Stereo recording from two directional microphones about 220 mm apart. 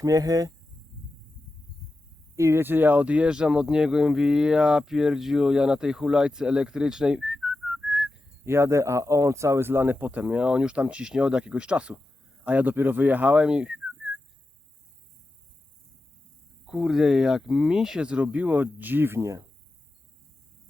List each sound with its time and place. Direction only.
0.0 s speech: 15° right (ahead or behind)
2.3 s speech: 10° right (ahead or behind)
16.6 s speech: centre (ahead or behind)